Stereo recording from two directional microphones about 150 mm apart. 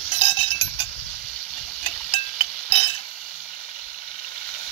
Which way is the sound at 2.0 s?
40° left (ahead or behind).